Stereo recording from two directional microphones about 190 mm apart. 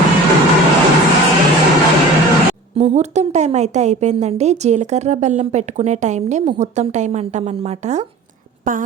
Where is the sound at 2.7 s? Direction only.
35° right (ahead or behind).